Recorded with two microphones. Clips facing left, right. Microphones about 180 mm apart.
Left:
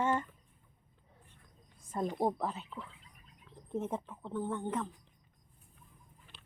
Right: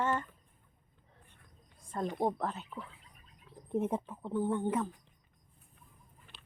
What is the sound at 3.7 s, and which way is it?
Speech, 10° right (ahead or behind).